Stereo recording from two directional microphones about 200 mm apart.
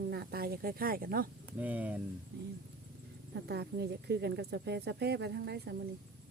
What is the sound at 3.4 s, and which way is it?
Speech, 55° right (ahead or behind).